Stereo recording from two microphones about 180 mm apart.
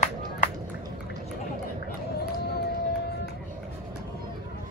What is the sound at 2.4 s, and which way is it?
Music, 65° left (ahead or behind).